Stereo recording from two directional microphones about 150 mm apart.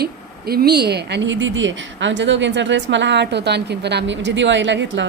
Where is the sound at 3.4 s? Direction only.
90° right.